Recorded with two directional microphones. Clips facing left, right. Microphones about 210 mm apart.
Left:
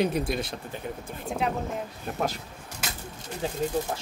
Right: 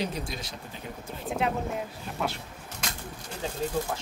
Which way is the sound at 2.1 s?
45° left (ahead or behind).